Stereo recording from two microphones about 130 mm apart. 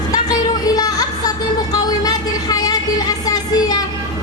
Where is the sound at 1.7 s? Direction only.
30° left (ahead or behind).